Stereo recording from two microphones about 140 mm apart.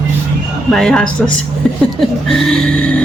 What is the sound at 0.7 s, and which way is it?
Vehicle, 5° left (ahead or behind).